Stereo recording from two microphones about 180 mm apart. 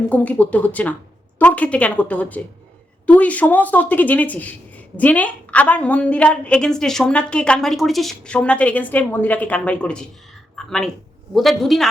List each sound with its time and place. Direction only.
0.1 s a woman's voice: 10° left (ahead or behind)
10.5 s a sound: 5° left (ahead or behind)
11.3 s a man's voice: centre (ahead or behind)